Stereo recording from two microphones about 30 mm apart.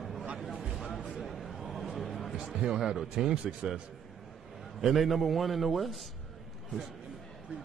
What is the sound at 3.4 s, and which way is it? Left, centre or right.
Speech, right.